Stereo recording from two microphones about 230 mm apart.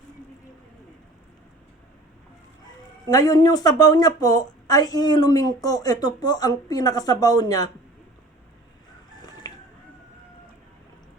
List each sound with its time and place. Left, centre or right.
3.1 s a woman's voice: centre